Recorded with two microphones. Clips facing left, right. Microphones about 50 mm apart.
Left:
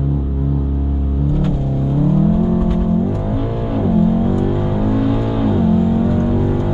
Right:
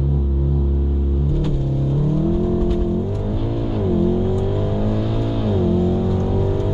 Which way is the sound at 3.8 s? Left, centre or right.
Centre.